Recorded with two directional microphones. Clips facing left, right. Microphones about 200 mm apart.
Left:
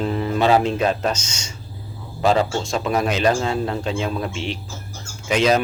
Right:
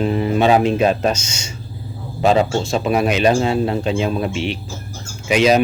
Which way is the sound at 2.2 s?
20° right (ahead or behind).